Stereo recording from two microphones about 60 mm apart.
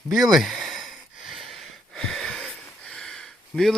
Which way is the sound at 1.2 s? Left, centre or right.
Centre.